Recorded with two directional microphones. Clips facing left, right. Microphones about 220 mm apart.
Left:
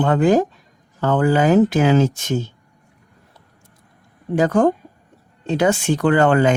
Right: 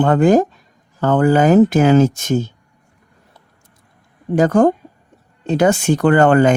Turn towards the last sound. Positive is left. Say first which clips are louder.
# right 3 dB
turn(degrees=-45)  # may be behind; listen again after turning